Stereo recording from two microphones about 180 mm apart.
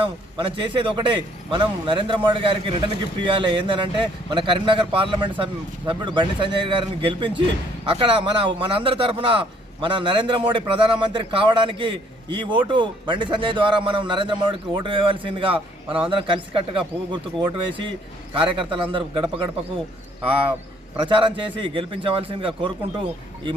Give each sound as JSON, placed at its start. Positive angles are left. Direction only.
{"t": 0.0, "sound": "a man's voice", "side_deg": -30}
{"t": 21.0, "sound": "a man's voice", "side_deg": -30}